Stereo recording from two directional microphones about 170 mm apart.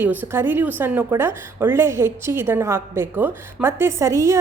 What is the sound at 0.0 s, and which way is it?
A woman's voice, 10° right (ahead or behind).